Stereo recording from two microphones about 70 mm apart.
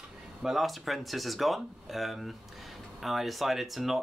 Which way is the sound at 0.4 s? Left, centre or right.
Centre.